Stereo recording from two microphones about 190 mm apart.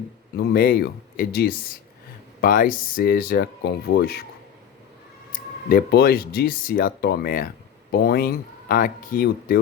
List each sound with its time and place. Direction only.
0.3 s speech: 50° left (ahead or behind)
5.3 s speech: 50° left (ahead or behind)